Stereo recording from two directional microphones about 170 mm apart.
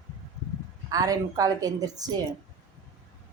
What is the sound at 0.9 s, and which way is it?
A woman's voice, 20° right (ahead or behind).